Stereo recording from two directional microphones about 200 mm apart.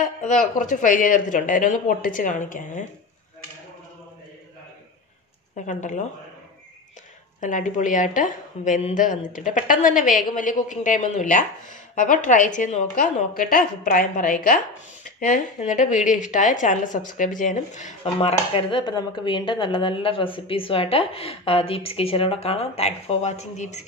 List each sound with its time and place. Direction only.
0.0 s a woman's voice: 40° left (ahead or behind)
5.7 s a woman's voice: 40° left (ahead or behind)
7.3 s a woman's voice: 40° left (ahead or behind)